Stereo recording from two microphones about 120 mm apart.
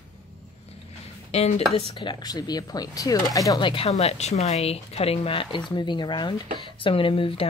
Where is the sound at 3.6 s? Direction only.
50° left (ahead or behind).